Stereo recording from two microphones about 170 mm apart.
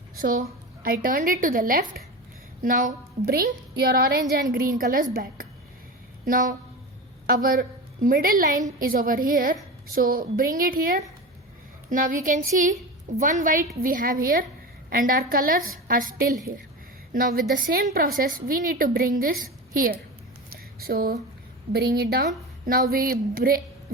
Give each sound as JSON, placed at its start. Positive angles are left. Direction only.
{"t": 0.2, "sound": "a woman's voice", "side_deg": -55}
{"t": 3.2, "sound": "a woman's voice", "side_deg": -60}
{"t": 20.5, "sound": "a sound", "side_deg": -60}
{"t": 21.7, "sound": "a woman's voice", "side_deg": -65}